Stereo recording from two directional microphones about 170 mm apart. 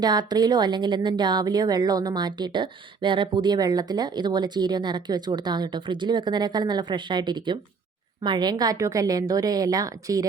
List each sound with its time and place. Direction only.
0.0 s speech: 25° right (ahead or behind)